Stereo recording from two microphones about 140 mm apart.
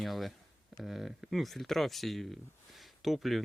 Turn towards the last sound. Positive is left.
turn(degrees=0)  # may be behind; listen again after turning